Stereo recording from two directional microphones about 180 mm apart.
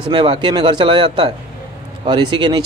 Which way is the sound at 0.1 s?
25° right (ahead or behind).